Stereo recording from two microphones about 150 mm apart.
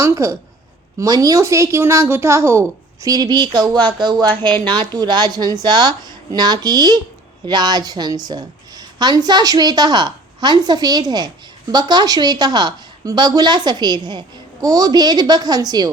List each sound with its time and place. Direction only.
0.0 s a woman's voice: 20° right (ahead or behind)